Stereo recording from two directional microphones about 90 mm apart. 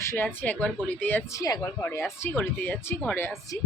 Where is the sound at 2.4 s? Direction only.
15° left (ahead or behind).